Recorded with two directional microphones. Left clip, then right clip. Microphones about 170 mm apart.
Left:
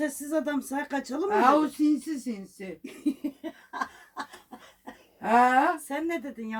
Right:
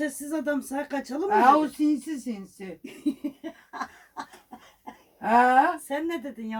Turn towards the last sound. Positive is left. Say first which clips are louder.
# even
turn(degrees=5)  # may be behind; listen again after turning